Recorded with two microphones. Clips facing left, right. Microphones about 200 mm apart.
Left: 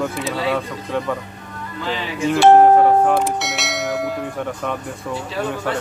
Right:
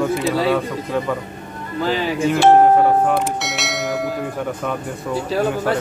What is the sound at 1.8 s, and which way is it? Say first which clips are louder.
Speech: right 6 dB; 40° right (ahead or behind).